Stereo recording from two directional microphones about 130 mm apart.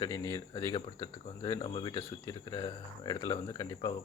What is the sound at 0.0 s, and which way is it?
Speech, 30° left (ahead or behind).